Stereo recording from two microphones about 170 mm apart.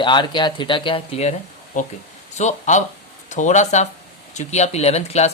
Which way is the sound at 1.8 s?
50° left (ahead or behind).